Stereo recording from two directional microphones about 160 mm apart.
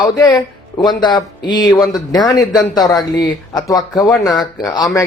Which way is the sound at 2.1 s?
25° left (ahead or behind).